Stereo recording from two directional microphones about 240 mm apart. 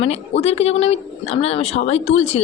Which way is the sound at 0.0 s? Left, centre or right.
Left.